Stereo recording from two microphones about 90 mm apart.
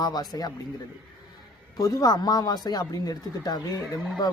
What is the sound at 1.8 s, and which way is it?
Speech, 40° left (ahead or behind).